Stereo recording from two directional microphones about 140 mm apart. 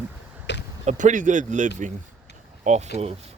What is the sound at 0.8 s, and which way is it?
Speech, 65° right (ahead or behind).